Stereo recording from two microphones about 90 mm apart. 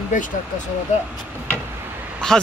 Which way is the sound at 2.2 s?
5° left (ahead or behind).